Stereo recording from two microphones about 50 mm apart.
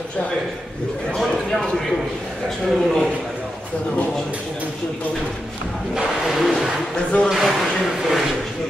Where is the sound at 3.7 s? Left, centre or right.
Left.